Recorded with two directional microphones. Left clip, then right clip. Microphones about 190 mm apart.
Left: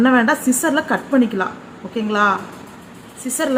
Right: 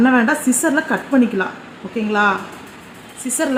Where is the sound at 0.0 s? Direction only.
20° right (ahead or behind).